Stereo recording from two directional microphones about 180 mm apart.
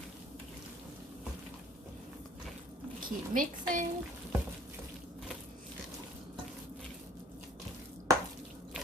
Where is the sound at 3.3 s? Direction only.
45° right (ahead or behind).